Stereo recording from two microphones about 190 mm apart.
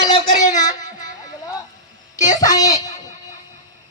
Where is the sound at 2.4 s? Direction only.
20° left (ahead or behind).